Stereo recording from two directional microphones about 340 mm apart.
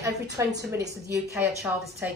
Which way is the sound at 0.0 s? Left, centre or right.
Centre.